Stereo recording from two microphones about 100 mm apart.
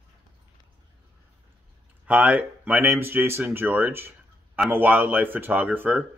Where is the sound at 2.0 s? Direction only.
15° right (ahead or behind).